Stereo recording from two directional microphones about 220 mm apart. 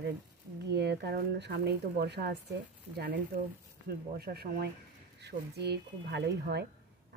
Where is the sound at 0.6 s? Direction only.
50° right (ahead or behind).